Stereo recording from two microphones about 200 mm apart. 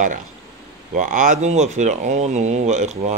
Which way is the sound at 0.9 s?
40° right (ahead or behind).